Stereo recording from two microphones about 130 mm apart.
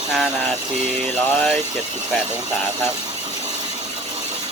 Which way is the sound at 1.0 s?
5° left (ahead or behind).